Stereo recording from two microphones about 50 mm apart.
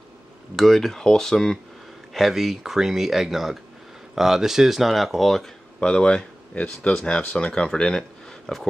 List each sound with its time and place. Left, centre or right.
0.6 s speech: centre
2.1 s speech: centre
5.8 s speech: centre